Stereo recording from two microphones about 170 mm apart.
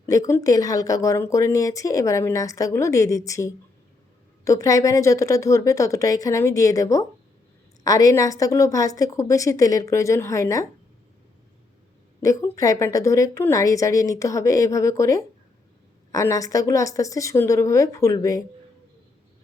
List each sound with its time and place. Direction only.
0.0 s speech: 20° left (ahead or behind)
12.2 s speech: 20° left (ahead or behind)